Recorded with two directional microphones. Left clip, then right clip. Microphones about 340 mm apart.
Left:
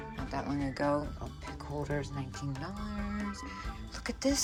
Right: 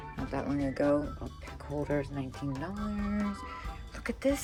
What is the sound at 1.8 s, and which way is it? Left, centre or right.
Speech, centre.